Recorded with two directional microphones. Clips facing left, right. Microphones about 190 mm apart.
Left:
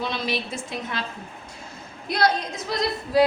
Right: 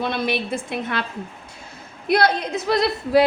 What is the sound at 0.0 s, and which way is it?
A woman's voice, 55° right (ahead or behind).